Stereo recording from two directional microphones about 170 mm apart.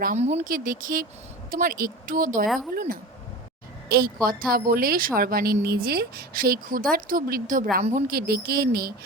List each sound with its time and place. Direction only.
0.2 s a woman's voice: 40° right (ahead or behind); by 8.9 s 65° right (ahead or behind)